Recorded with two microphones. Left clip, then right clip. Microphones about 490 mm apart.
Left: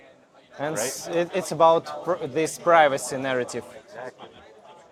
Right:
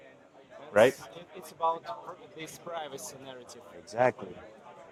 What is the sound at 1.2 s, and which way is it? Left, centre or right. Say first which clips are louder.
Speech: left 16 dB; left.